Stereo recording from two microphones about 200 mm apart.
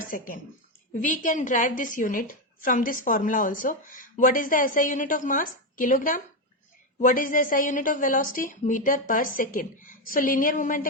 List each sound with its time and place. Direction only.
1.0 s a woman's voice: 40° left (ahead or behind)